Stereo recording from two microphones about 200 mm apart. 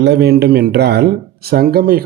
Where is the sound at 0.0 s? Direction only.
55° right (ahead or behind).